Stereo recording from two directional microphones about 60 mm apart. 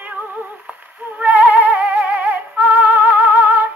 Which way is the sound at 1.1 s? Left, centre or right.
Right.